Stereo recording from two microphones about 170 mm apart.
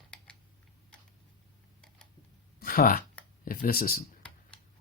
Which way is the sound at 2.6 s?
60° left (ahead or behind).